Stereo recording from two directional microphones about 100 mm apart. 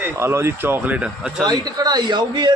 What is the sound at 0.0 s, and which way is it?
Speech, 25° right (ahead or behind).